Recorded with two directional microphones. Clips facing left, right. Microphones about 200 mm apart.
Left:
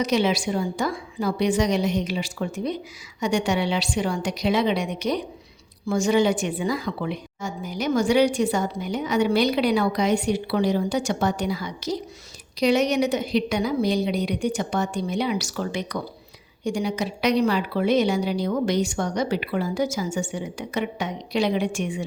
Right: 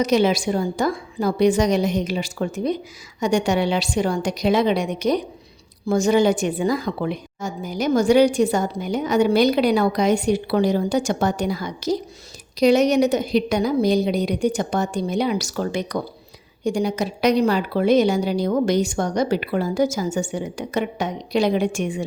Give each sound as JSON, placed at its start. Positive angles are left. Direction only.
{"t": 0.0, "sound": "a woman's voice", "side_deg": -45}